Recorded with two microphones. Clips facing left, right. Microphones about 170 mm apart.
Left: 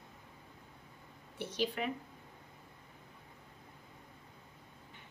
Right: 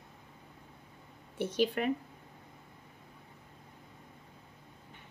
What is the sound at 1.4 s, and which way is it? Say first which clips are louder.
Speech: right 6 dB; 50° right (ahead or behind).